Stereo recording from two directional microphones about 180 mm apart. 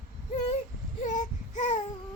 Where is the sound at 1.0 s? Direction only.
40° left (ahead or behind).